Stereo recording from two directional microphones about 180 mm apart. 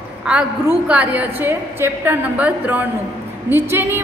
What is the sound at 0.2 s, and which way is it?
A woman's voice, 5° right (ahead or behind).